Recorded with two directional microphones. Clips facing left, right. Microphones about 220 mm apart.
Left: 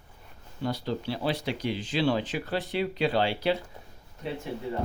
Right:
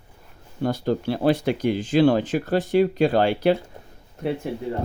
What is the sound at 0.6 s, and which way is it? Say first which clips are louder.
Speech: right 7 dB; 50° right (ahead or behind).